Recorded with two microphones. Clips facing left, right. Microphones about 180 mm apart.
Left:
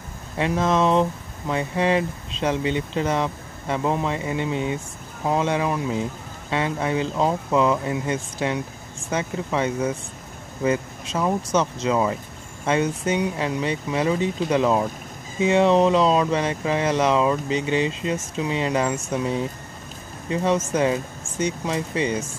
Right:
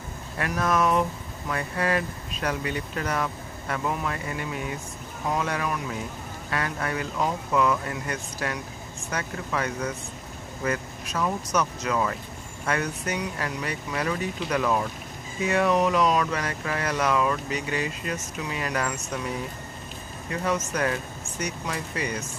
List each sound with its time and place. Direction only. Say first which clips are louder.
0.4 s speech: left 4 dB; 25° left (ahead or behind)